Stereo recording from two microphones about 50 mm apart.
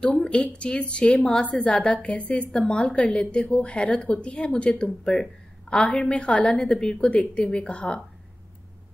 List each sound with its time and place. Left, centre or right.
0.0 s a woman's voice: left